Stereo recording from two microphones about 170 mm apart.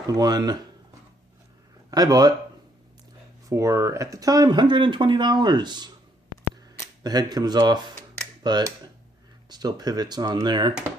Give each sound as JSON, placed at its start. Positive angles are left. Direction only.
{"t": 0.2, "sound": "speech", "side_deg": -25}
{"t": 1.9, "sound": "speech", "side_deg": -25}
{"t": 3.5, "sound": "speech", "side_deg": -20}
{"t": 7.0, "sound": "speech", "side_deg": -25}